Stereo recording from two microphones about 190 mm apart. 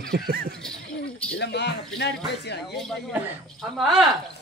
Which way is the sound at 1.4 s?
60° left (ahead or behind).